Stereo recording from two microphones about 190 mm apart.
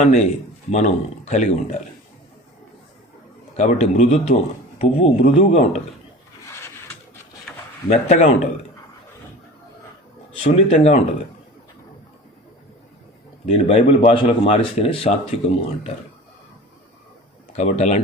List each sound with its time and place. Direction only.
0.0 s speech: 35° left (ahead or behind)
3.6 s speech: 35° left (ahead or behind)
6.5 s a sound: 15° left (ahead or behind)
7.9 s speech: 40° left (ahead or behind)
10.5 s speech: 35° left (ahead or behind)
13.4 s speech: 30° left (ahead or behind)
17.6 s speech: 35° left (ahead or behind)